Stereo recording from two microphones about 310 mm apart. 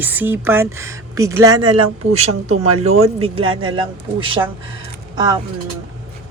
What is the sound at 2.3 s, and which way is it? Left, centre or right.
Speech, right.